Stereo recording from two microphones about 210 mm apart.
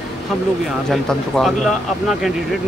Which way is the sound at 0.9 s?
Centre (ahead or behind).